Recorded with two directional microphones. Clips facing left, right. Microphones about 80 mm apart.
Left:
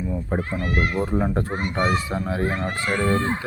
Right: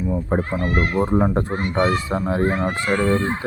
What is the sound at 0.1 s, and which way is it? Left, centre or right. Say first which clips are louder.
Speech: right 6 dB; right.